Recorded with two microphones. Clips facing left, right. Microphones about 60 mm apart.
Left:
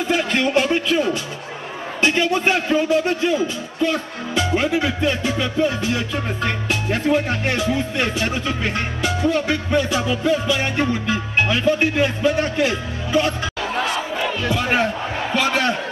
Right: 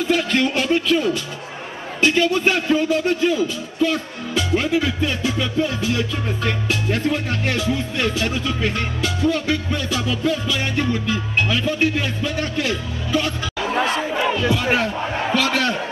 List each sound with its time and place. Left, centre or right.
0.1 s speech: centre
2.0 s music: centre
2.7 s speech: centre
3.8 s music: centre
13.7 s crowd: centre
14.5 s speech: centre
15.3 s a sound: centre